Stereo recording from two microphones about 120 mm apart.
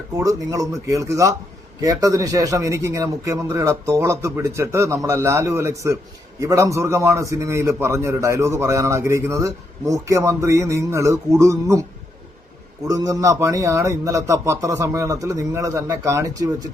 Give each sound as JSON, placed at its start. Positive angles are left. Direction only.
{"t": 0.2, "sound": "a man's voice", "side_deg": -30}
{"t": 12.9, "sound": "a man's voice", "side_deg": -30}